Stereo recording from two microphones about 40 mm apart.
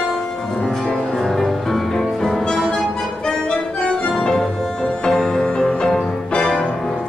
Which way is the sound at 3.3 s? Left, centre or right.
Left.